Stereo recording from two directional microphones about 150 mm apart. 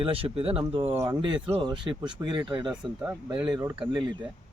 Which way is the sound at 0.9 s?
20° right (ahead or behind).